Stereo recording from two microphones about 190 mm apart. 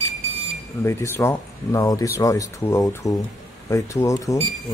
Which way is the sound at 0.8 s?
15° left (ahead or behind).